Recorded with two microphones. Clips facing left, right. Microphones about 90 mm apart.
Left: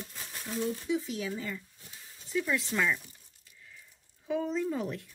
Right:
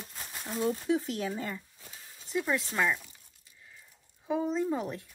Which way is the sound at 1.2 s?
35° right (ahead or behind).